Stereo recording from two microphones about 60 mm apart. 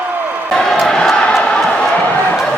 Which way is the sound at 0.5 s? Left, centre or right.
Centre.